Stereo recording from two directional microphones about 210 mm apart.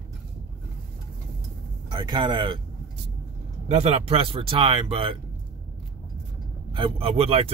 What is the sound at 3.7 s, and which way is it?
A man's voice, 30° right (ahead or behind).